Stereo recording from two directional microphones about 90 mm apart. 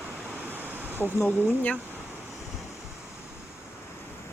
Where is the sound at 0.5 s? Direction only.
20° right (ahead or behind).